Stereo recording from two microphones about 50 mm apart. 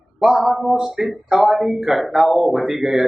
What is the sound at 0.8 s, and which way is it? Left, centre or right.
A man's voice, centre.